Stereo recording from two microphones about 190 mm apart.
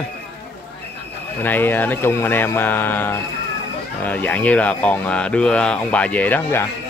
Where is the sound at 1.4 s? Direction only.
10° left (ahead or behind).